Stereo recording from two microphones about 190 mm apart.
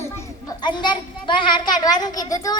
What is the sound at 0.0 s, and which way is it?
A child's voice, 15° left (ahead or behind).